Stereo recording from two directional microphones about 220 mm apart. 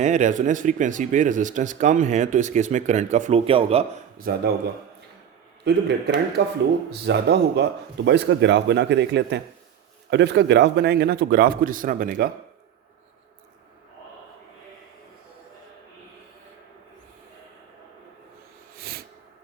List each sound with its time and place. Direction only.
0.0 s speech: 35° right (ahead or behind)
4.2 s speech: 45° right (ahead or behind)
5.6 s speech: 50° right (ahead or behind)
18.8 s snort: 45° right (ahead or behind)